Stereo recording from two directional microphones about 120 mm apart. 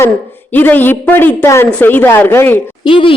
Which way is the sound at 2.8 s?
45° left (ahead or behind).